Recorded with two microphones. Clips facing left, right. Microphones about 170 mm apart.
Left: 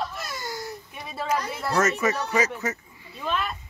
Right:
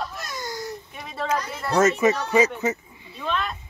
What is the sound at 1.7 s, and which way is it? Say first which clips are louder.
Speech: right 5 dB; 20° right (ahead or behind).